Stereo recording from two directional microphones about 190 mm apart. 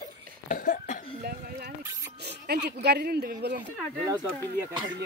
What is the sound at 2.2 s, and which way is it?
Speech, 60° right (ahead or behind).